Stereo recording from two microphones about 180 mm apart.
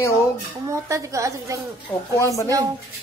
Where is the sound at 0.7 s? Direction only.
15° right (ahead or behind).